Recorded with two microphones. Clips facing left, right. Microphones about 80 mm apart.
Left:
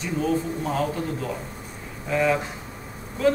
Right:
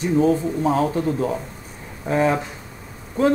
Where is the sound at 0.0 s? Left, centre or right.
Right.